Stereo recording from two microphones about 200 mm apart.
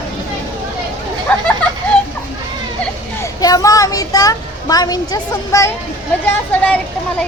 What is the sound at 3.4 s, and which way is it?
Speech, 15° left (ahead or behind).